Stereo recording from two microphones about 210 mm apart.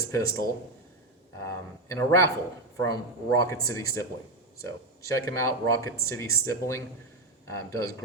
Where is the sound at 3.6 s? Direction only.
15° left (ahead or behind).